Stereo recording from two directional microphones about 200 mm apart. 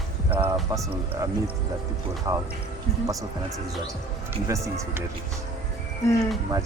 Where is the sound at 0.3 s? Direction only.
10° right (ahead or behind).